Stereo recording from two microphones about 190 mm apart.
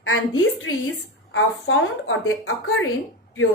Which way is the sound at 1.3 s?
90° left.